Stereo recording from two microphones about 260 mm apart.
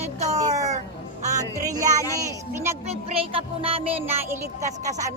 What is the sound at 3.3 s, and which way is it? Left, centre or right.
Music, right.